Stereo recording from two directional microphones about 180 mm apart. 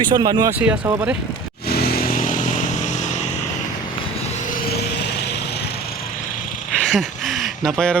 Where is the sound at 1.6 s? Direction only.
60° left (ahead or behind); by 3.2 s 40° left (ahead or behind).